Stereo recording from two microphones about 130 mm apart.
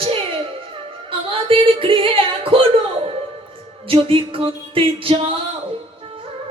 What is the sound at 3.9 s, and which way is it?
Music, 45° right (ahead or behind).